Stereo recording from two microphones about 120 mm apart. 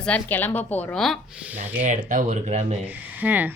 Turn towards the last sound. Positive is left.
turn(degrees=-15)  # may be behind; listen again after turning